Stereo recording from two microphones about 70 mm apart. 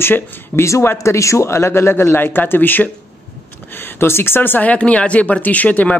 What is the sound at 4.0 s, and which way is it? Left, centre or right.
Speech, left.